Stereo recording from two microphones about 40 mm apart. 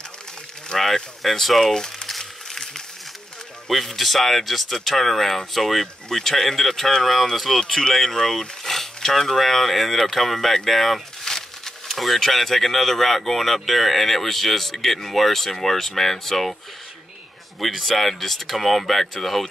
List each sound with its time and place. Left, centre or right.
0.7 s speech: centre
1.7 s speech: centre
2.0 s a sound: centre
3.6 s speech: centre
17.6 s speech: centre